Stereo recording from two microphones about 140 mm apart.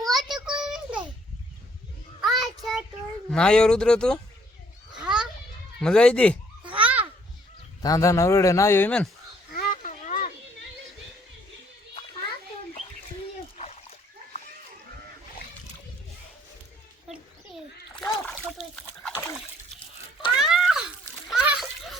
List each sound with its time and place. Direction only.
0.0 s a sound: centre (ahead or behind)
2.2 s child singing: centre (ahead or behind)
3.2 s speech: 5° left (ahead or behind)
4.9 s children playing: 5° right (ahead or behind)
5.8 s speech: 5° left (ahead or behind)
6.8 s children playing: 10° right (ahead or behind)
7.8 s speech: 25° left (ahead or behind)
9.5 s a sound: 80° left
13.6 s splash: 50° left (ahead or behind)
18.8 s splash: 5° left (ahead or behind)
20.3 s children playing: 5° right (ahead or behind)